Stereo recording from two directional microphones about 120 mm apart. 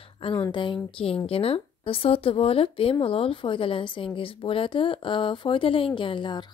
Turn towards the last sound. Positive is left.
turn(degrees=40)  # may be behind; listen again after turning